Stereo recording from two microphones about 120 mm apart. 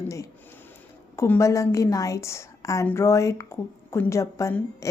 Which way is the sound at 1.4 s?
25° left (ahead or behind).